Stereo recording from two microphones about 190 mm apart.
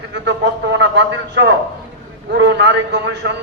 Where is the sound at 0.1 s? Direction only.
70° right (ahead or behind).